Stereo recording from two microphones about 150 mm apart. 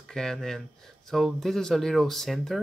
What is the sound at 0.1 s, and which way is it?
Speech, 5° left (ahead or behind).